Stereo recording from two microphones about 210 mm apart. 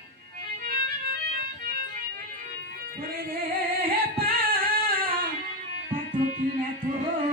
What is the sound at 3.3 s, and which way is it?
Singing, 45° right (ahead or behind).